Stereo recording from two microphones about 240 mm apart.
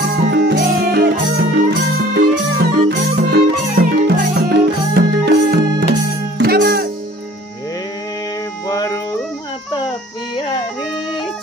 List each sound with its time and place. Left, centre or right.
0.1 s music: right
3.7 s music: right
8.6 s music: centre
10.3 s music: left